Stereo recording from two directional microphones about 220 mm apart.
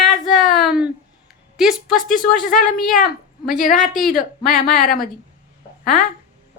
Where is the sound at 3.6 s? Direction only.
35° left (ahead or behind).